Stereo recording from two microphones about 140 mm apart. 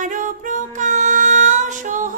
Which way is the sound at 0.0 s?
70° right (ahead or behind).